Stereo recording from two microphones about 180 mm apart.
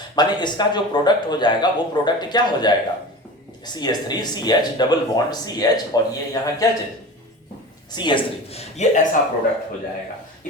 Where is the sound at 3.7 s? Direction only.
20° left (ahead or behind).